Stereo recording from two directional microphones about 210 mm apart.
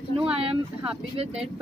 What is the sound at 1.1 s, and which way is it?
Speech, 30° right (ahead or behind).